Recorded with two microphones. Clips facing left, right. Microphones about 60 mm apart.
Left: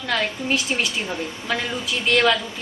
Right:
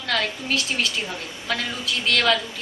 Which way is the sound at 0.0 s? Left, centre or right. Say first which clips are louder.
Left 1 dB; centre.